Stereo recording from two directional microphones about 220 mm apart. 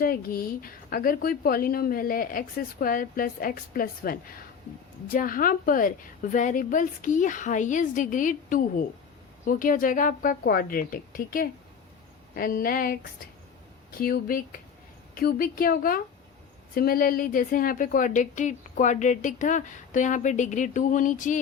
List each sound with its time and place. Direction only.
0.0 s a woman's voice: 40° left (ahead or behind)
14.0 s a woman's voice: 40° left (ahead or behind)